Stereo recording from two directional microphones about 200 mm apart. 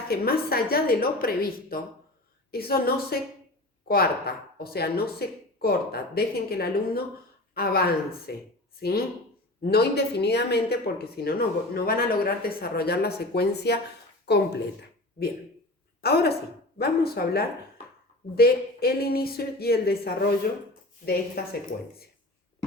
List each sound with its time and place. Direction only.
0.1 s speech: 50° left (ahead or behind)
16.0 s a woman's voice: 50° left (ahead or behind)